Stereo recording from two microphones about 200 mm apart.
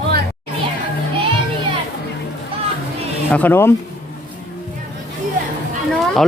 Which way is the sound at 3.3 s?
10° left (ahead or behind).